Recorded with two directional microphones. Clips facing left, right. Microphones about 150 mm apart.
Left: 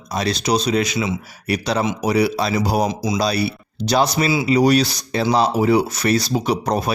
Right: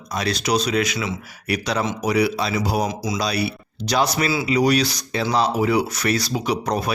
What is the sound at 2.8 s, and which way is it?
Speech, 20° left (ahead or behind).